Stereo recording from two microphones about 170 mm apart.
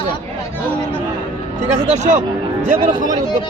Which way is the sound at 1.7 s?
45° right (ahead or behind).